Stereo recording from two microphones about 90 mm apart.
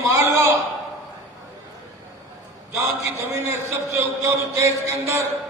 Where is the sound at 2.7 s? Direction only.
30° right (ahead or behind).